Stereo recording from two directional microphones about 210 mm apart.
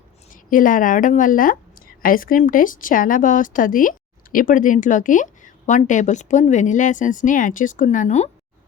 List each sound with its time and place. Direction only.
0.3 s speech: 40° left (ahead or behind)